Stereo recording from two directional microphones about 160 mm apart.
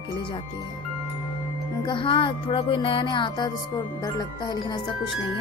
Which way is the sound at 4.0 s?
25° left (ahead or behind).